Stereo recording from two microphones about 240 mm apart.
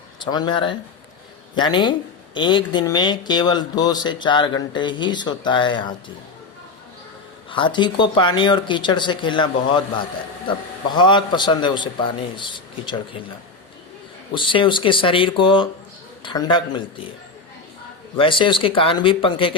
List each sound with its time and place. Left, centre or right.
0.3 s a woman's voice: centre
7.5 s a woman's voice: centre
14.3 s a woman's voice: left
18.2 s a woman's voice: left